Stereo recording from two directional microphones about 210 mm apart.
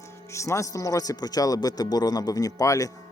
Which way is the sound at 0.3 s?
15° left (ahead or behind).